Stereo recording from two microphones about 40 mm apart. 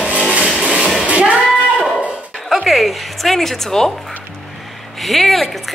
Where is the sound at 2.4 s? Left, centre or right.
Centre.